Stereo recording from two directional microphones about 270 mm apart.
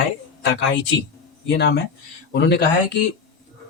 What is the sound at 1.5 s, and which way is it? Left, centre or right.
Speech, left.